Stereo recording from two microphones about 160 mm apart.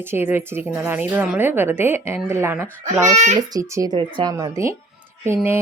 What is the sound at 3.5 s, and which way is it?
Speech, 20° right (ahead or behind).